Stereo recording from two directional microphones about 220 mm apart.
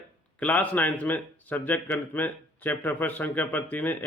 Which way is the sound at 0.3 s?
5° left (ahead or behind).